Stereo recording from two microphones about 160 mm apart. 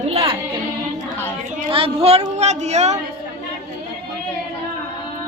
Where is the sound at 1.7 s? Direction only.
35° right (ahead or behind).